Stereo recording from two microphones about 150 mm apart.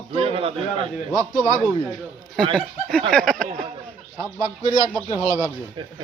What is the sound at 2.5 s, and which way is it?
Speech, 5° left (ahead or behind).